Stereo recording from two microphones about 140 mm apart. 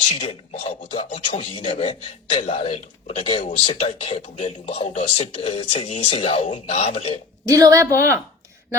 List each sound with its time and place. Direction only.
0.2 s speech: 40° left (ahead or behind)
7.4 s a woman's voice: 25° right (ahead or behind)